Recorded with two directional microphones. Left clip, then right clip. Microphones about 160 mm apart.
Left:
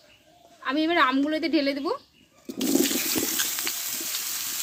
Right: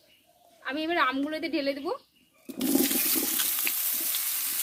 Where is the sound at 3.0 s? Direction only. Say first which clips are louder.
Left 3 dB; 10° right (ahead or behind).